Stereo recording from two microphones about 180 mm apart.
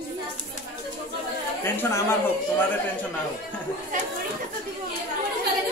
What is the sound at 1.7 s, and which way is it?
Speech, 15° left (ahead or behind).